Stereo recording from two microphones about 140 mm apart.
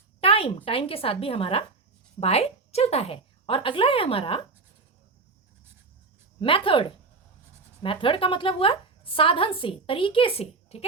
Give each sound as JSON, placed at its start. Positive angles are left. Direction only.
{"t": 0.2, "sound": "a woman's voice", "side_deg": 40}
{"t": 6.4, "sound": "a woman's voice", "side_deg": 40}